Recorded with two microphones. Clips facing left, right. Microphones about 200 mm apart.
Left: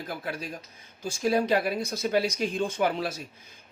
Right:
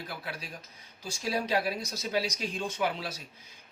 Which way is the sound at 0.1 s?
45° left (ahead or behind).